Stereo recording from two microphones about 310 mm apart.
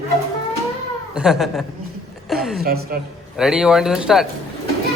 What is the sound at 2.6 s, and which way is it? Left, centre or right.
Speech, right.